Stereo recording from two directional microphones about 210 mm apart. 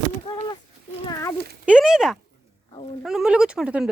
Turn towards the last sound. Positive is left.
turn(degrees=-5)  # may be behind; listen again after turning